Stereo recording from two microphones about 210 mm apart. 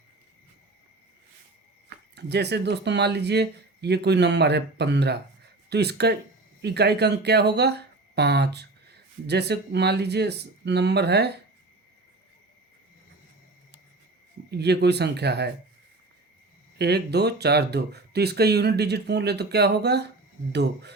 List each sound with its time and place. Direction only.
2.1 s speech: 50° right (ahead or behind)
14.5 s speech: 50° right (ahead or behind)
16.7 s speech: 50° right (ahead or behind)